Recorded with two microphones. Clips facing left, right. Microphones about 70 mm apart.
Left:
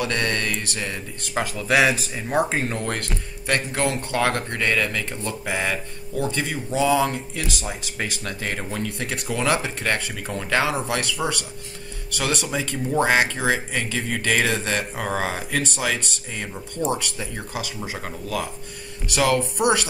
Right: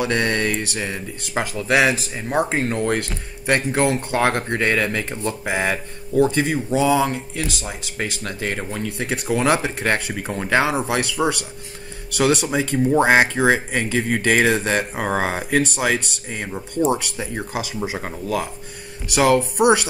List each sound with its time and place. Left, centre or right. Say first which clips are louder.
0.0 s speech: right 4 dB; centre
9.3 s speech: right 4 dB; centre